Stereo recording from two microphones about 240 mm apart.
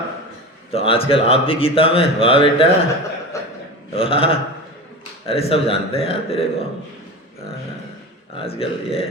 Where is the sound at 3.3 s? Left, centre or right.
Centre.